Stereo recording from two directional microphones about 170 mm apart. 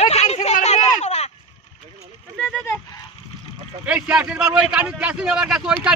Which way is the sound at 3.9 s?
5° right (ahead or behind).